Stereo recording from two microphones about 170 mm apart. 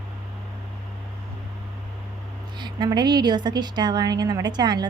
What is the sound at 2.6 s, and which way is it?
A woman's voice, 25° right (ahead or behind).